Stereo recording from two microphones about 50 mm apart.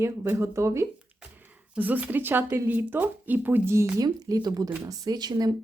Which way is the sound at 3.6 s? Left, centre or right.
Right.